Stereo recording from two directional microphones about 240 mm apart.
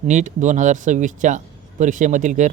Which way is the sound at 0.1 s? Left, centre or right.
Right.